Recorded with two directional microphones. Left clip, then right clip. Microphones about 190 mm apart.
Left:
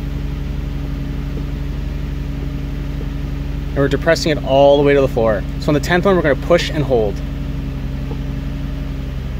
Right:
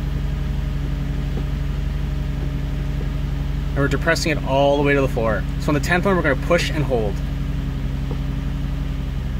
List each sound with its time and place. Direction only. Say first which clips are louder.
3.7 s speech: left 5 dB; 15° left (ahead or behind)